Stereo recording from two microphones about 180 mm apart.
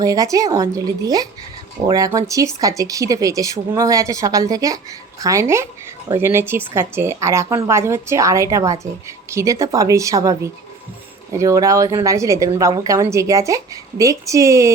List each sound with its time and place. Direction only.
0.0 s speech: 20° right (ahead or behind)